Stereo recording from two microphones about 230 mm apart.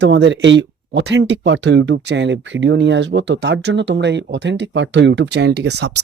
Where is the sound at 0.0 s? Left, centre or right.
Right.